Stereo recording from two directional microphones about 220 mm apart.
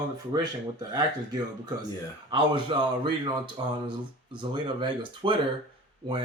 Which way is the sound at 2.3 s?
20° right (ahead or behind).